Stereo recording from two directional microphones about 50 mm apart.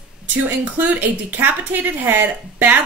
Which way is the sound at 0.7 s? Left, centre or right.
Right.